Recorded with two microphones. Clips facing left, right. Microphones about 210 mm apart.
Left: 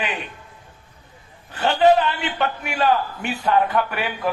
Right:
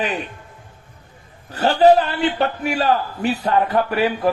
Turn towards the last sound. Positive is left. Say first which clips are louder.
# right 5 dB
turn(degrees=-35)  # may be behind; listen again after turning